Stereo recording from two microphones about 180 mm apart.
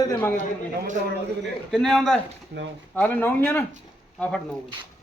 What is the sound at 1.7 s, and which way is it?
A man's voice, centre (ahead or behind).